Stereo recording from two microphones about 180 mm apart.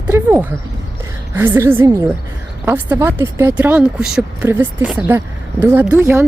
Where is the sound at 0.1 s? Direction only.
15° right (ahead or behind).